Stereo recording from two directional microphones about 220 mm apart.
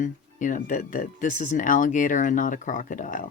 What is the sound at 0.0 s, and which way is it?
Speech, 35° left (ahead or behind).